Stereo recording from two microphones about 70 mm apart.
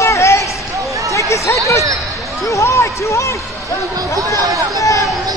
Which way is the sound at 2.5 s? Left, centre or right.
Left.